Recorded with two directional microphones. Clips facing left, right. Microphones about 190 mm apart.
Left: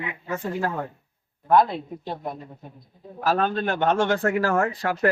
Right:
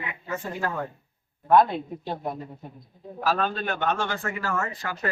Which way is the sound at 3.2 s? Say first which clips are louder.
Left 3 dB; 55° left (ahead or behind).